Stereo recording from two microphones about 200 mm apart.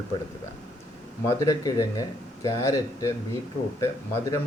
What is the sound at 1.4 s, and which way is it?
Speech, 15° left (ahead or behind).